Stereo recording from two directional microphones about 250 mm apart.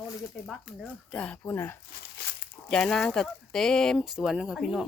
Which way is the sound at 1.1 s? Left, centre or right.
Centre.